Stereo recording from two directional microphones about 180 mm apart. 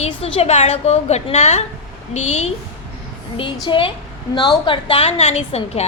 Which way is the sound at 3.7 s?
30° left (ahead or behind).